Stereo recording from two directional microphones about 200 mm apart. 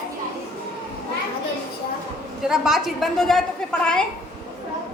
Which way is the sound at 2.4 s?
Centre (ahead or behind).